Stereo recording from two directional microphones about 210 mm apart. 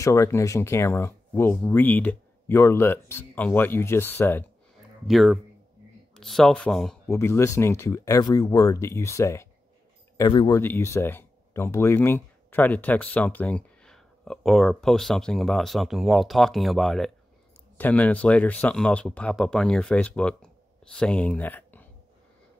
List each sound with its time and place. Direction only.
0.0 s speech: 15° left (ahead or behind)
7.1 s speech: 15° left (ahead or behind)